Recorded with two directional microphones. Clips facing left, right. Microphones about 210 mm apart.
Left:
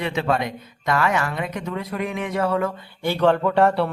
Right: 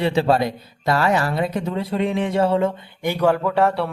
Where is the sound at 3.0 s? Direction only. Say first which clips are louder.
Even; 10° right (ahead or behind).